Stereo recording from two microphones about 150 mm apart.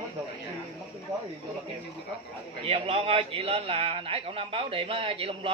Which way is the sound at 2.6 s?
40° right (ahead or behind).